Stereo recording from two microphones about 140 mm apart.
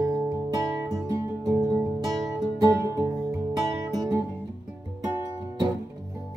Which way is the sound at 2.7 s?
20° right (ahead or behind).